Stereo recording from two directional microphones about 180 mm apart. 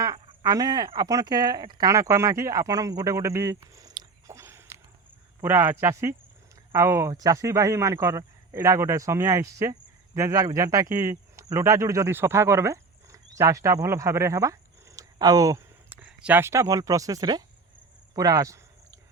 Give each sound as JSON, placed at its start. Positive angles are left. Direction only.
{"t": 0.0, "sound": "a man's voice", "side_deg": -20}
{"t": 18.1, "sound": "cricket", "side_deg": -20}